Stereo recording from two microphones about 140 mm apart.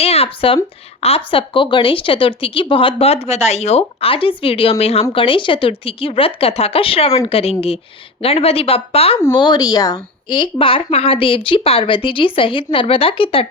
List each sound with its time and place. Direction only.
0.0 s a woman's voice: 45° left (ahead or behind)
9.3 s a woman's voice: 30° left (ahead or behind)